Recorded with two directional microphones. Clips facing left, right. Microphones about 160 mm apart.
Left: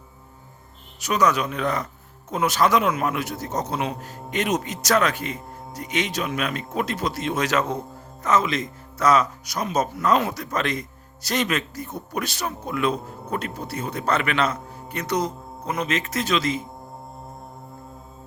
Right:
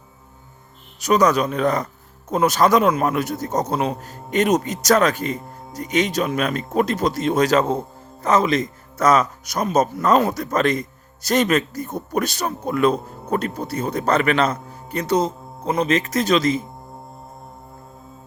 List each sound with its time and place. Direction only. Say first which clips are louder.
0.9 s a man's voice: right 5 dB; 40° right (ahead or behind)
15.0 s a man's voice: right 5 dB; 30° right (ahead or behind)